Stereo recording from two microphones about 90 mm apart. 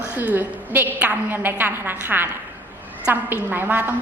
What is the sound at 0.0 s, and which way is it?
A woman's voice, 15° right (ahead or behind).